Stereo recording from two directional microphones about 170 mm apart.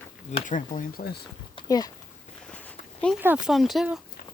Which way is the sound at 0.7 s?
65° left (ahead or behind).